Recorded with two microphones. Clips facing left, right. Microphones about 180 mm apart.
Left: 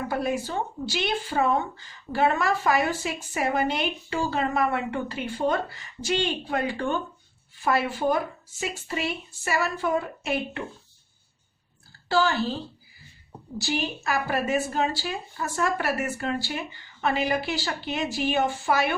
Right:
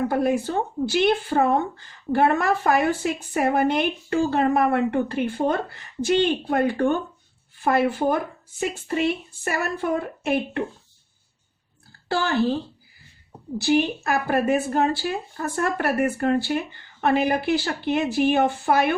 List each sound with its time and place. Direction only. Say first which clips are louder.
0.1 s speech: right 5 dB; 50° right (ahead or behind)
12.0 s speech: right 2 dB; 55° right (ahead or behind)
13.6 s speech: right 8 dB; 55° right (ahead or behind)